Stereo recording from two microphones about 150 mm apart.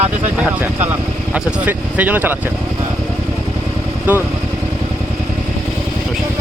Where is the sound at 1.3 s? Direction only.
10° right (ahead or behind).